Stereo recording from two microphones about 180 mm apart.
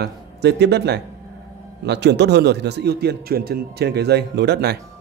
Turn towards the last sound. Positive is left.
turn(degrees=-65)  # may be behind; listen again after turning